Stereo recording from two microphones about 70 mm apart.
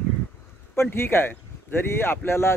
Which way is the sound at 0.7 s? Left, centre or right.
Left.